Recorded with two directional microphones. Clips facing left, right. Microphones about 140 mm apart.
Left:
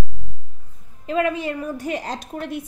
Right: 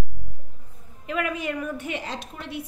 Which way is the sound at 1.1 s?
30° left (ahead or behind).